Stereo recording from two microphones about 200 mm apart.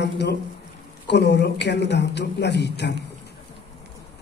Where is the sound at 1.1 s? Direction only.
60° left (ahead or behind).